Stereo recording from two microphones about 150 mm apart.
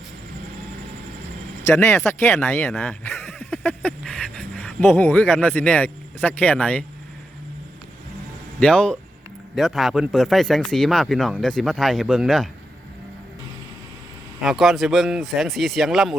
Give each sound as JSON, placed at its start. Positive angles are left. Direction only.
{"t": 1.6, "sound": "speech", "side_deg": 20}
{"t": 2.8, "sound": "a sound", "side_deg": 15}
{"t": 8.5, "sound": "speech", "side_deg": 5}
{"t": 14.4, "sound": "speech", "side_deg": 0}